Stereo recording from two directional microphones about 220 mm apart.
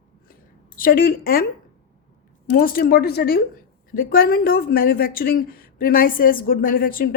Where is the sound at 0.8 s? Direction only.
40° left (ahead or behind).